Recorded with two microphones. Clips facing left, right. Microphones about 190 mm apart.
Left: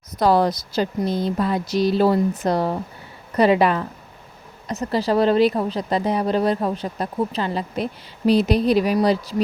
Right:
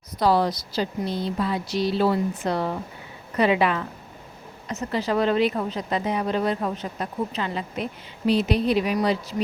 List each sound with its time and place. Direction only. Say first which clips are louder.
0.2 s a woman's voice: left 3 dB; 50° left (ahead or behind)